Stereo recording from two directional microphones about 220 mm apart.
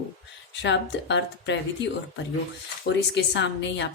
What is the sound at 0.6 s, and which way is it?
Speech, 55° left (ahead or behind).